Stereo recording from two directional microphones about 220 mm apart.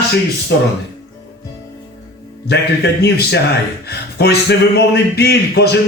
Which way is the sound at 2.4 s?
50° left (ahead or behind).